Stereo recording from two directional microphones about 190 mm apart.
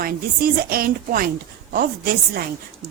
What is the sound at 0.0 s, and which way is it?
A woman's voice, 50° right (ahead or behind).